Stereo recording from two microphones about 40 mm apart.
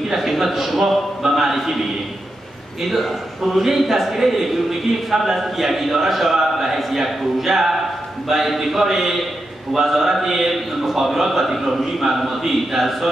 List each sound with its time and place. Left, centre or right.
0.1 s a man's voice: centre
2.8 s a man's voice: centre